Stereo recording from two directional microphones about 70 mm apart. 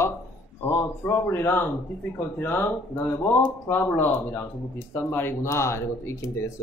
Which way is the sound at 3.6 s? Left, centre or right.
Left.